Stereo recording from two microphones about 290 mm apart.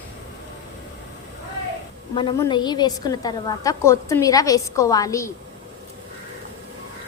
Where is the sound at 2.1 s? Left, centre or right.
Centre.